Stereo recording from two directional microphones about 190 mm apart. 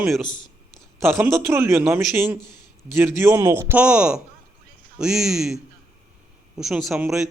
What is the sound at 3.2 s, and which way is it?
A man's voice, 15° right (ahead or behind).